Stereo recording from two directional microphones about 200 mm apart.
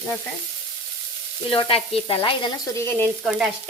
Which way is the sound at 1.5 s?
25° left (ahead or behind).